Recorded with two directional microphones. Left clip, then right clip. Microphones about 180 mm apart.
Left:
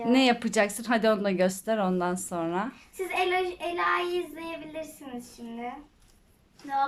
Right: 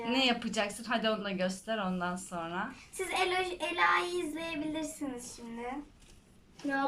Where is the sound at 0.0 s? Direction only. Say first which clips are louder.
Left 6 dB; 30° left (ahead or behind).